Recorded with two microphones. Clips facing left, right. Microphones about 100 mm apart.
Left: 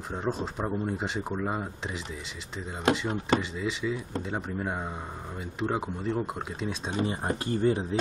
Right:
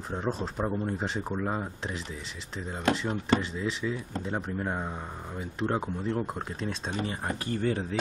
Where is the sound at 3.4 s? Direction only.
5° left (ahead or behind).